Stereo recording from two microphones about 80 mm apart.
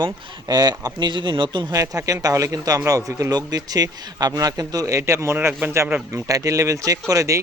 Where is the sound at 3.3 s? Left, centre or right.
Right.